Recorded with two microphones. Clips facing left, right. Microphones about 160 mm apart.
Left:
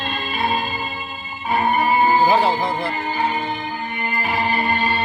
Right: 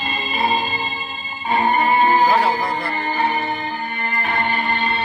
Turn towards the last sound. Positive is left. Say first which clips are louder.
# left 1 dB
turn(degrees=5)  # may be behind; listen again after turning